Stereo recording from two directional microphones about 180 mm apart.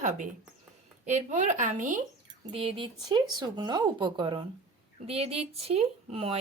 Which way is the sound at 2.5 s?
30° right (ahead or behind).